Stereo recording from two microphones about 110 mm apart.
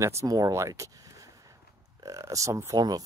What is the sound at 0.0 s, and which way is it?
Speech, 25° right (ahead or behind).